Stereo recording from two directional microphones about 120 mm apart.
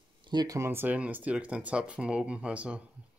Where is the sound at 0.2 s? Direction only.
35° right (ahead or behind).